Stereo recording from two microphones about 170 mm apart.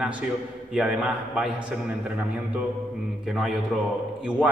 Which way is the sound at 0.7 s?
5° right (ahead or behind).